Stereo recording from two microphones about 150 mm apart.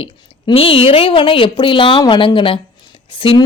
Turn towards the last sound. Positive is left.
turn(degrees=35)  # may be behind; listen again after turning